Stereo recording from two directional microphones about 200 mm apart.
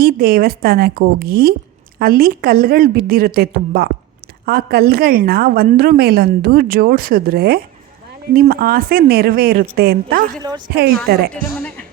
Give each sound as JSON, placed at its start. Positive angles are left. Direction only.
{"t": 0.0, "sound": "a woman's voice", "side_deg": -45}
{"t": 10.4, "sound": "a woman's voice", "side_deg": -20}
{"t": 11.1, "sound": "a woman's voice", "side_deg": -50}